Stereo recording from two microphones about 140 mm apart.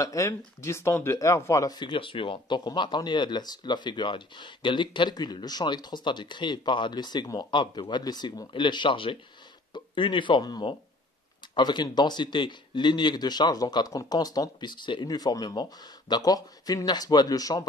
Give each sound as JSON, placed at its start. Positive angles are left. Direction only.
{"t": 0.0, "sound": "speech", "side_deg": 20}